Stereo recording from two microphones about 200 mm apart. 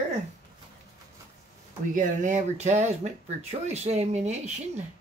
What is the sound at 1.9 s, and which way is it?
Speech, 40° right (ahead or behind).